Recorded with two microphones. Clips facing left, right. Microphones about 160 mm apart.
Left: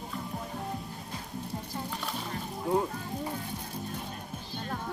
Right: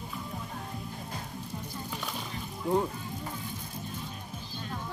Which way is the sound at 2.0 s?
Centre (ahead or behind).